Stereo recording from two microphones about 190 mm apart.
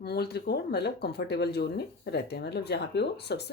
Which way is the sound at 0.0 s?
55° left (ahead or behind).